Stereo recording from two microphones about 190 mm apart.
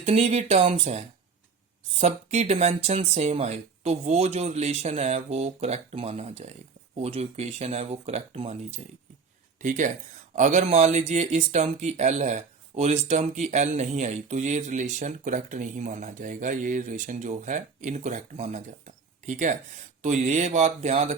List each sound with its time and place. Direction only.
0.0 s speech: 35° right (ahead or behind)